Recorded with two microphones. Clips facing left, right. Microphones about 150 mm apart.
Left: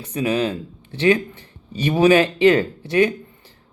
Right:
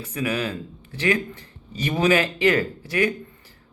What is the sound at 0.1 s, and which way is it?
Speech, 25° left (ahead or behind).